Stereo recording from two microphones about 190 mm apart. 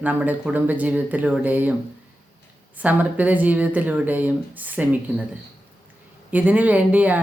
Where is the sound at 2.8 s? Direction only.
10° right (ahead or behind).